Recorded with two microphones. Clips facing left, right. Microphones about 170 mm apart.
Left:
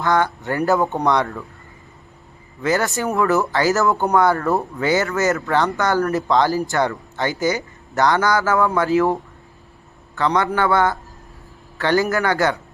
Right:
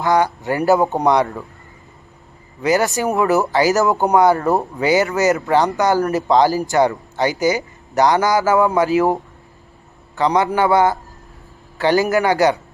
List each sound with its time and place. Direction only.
0.0 s a man's voice: 15° right (ahead or behind)
2.6 s speech: 15° right (ahead or behind)